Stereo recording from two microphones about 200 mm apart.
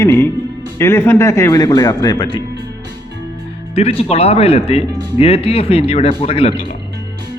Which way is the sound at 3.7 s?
30° left (ahead or behind).